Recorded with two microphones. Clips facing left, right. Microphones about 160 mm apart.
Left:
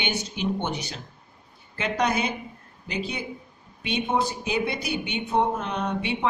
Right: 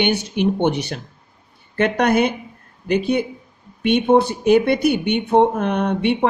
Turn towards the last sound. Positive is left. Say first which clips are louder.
# right 8 dB
turn(degrees=-60)  # may be behind; listen again after turning